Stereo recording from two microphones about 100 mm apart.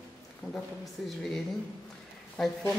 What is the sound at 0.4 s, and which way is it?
Speech, 5° right (ahead or behind).